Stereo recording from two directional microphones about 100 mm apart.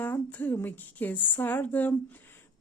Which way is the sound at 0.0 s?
15° left (ahead or behind).